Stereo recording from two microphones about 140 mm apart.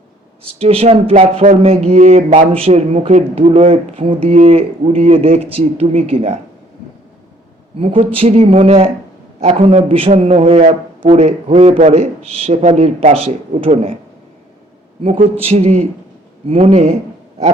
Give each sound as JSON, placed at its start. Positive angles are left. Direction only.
{"t": 0.4, "sound": "a man's voice", "side_deg": -45}
{"t": 7.8, "sound": "a man's voice", "side_deg": -40}
{"t": 15.0, "sound": "a man's voice", "side_deg": -45}